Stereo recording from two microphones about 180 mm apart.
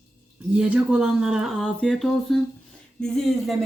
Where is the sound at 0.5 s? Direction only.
5° right (ahead or behind).